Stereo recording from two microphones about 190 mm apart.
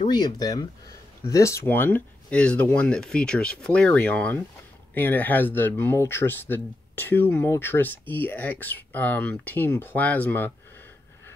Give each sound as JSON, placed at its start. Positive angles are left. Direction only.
{"t": 0.1, "sound": "speech", "side_deg": 20}